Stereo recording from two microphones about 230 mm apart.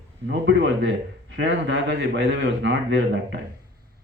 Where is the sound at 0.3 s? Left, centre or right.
Right.